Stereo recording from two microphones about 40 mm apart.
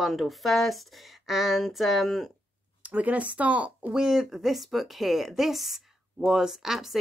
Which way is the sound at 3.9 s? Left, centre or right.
Centre.